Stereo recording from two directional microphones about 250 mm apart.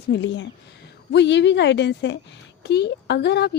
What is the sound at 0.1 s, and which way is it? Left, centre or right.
Speech, left.